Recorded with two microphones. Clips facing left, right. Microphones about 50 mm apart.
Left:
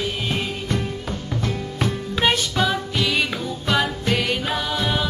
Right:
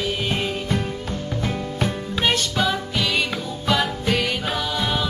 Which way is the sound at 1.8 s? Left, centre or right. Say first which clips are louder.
Left 2 dB; centre.